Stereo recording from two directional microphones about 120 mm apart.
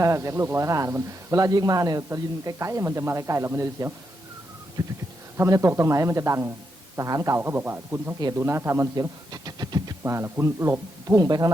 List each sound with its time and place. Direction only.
0.0 s speech: 25° right (ahead or behind)
10.0 s speech: 20° right (ahead or behind)